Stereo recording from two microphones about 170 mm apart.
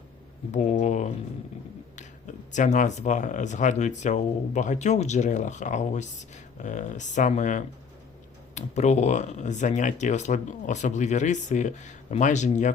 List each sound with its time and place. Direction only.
0.5 s speech: 45° left (ahead or behind)